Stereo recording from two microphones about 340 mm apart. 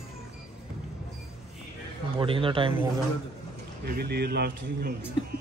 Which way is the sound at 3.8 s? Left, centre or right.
Right.